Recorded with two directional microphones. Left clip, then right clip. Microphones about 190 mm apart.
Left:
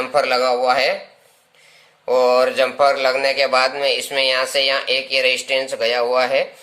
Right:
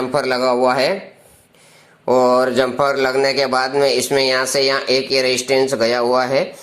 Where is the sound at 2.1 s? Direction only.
25° right (ahead or behind).